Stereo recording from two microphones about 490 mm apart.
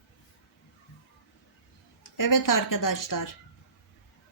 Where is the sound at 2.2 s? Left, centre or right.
Left.